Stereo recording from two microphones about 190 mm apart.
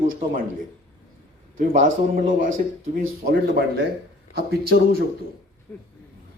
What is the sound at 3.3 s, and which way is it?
Speech, 55° right (ahead or behind).